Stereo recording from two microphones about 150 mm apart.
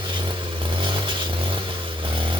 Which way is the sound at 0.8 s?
35° right (ahead or behind).